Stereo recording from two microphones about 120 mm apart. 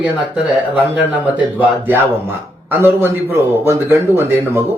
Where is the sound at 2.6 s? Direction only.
20° right (ahead or behind).